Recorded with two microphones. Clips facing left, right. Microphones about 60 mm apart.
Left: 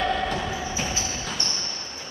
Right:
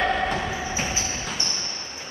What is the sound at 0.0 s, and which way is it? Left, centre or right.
Music, right.